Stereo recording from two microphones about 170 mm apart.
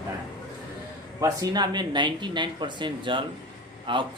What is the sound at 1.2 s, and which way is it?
Speech, 20° right (ahead or behind).